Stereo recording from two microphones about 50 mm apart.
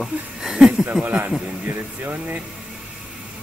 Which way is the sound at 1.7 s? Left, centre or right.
Right.